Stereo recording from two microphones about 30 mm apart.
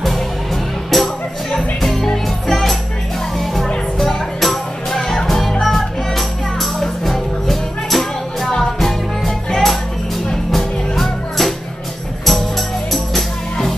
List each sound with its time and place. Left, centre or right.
0.8 s music: centre
2.0 s music: centre
2.5 s music: centre